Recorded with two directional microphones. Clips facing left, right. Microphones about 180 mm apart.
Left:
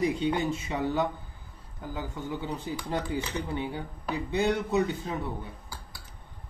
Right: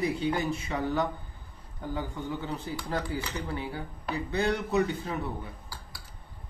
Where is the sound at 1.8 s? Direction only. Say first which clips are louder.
Right 2 dB; 5° left (ahead or behind).